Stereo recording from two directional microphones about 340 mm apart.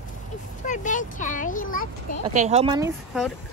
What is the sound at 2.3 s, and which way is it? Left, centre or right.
Speech, centre.